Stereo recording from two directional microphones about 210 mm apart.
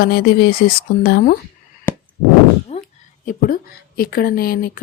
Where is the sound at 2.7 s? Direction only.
30° left (ahead or behind).